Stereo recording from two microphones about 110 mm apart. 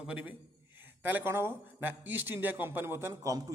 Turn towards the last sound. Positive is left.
turn(degrees=-35)  # may be behind; listen again after turning